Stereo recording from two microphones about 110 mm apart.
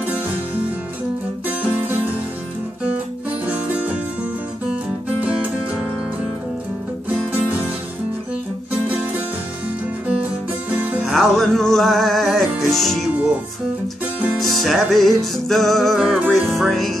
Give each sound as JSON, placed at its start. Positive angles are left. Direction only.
{"t": 1.6, "sound": "music", "side_deg": -15}
{"t": 3.4, "sound": "music", "side_deg": -15}
{"t": 10.7, "sound": "music", "side_deg": -15}
{"t": 11.1, "sound": "music", "side_deg": 0}
{"t": 14.4, "sound": "music", "side_deg": 0}